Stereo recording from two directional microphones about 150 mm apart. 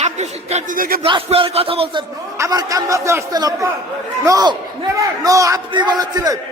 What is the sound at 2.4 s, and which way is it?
A man's voice, 25° right (ahead or behind).